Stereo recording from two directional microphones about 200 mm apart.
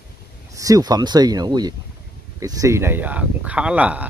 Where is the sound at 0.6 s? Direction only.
15° right (ahead or behind).